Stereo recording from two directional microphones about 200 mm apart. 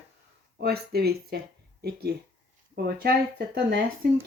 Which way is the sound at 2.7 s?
50° right (ahead or behind).